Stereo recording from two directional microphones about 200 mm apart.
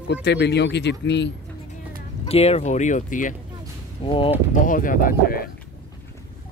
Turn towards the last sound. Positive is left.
turn(degrees=45)  # may be behind; listen again after turning